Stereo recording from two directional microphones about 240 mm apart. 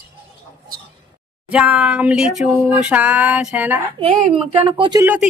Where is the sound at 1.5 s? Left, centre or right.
Centre.